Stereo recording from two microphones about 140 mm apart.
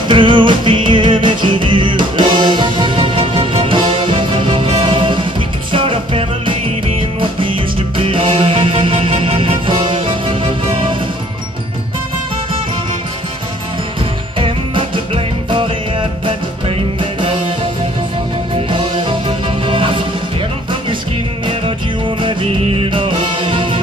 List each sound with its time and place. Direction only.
0.1 s music: 35° right (ahead or behind)
15.1 s music: 40° right (ahead or behind)
18.7 s music: 40° right (ahead or behind)
22.2 s music: 40° right (ahead or behind)